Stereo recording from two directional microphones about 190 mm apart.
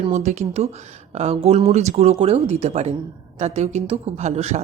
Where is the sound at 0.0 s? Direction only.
35° right (ahead or behind).